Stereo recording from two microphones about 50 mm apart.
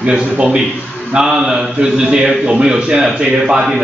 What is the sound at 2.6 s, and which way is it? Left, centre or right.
A man's voice, centre.